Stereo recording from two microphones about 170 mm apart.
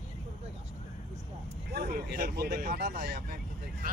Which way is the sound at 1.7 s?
65° right (ahead or behind).